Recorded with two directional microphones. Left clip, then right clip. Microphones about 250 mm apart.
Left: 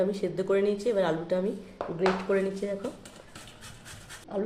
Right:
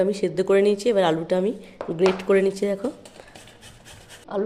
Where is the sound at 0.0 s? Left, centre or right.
Right.